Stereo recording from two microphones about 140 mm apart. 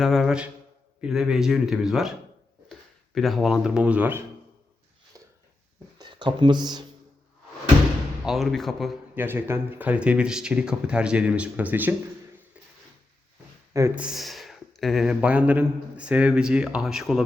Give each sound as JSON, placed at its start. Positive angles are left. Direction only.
{"t": 0.0, "sound": "speech", "side_deg": 0}
{"t": 3.2, "sound": "speech", "side_deg": 0}
{"t": 5.2, "sound": "a sound", "side_deg": -25}
{"t": 6.0, "sound": "speech", "side_deg": -35}
{"t": 8.2, "sound": "speech", "side_deg": 0}
{"t": 9.1, "sound": "speech", "side_deg": -15}
{"t": 13.9, "sound": "speech", "side_deg": -5}